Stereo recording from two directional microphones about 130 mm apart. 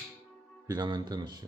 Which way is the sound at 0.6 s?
35° right (ahead or behind).